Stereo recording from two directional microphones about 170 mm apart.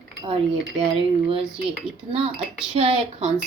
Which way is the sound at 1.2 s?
30° right (ahead or behind).